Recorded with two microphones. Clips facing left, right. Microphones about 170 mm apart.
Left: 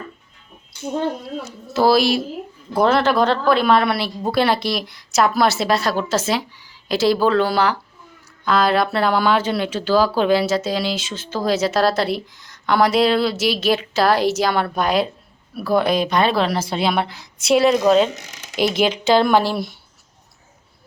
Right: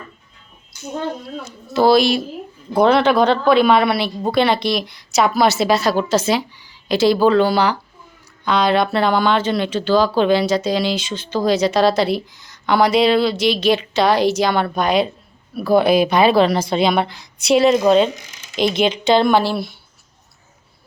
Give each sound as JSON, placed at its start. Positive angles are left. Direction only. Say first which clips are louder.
{"t": 0.7, "sound": "speech", "louder": "left 3 dB", "side_deg": 30}
{"t": 1.4, "sound": "speech", "louder": "right 3 dB", "side_deg": 5}